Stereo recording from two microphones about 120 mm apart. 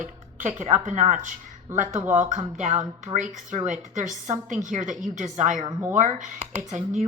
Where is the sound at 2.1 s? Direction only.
90° right.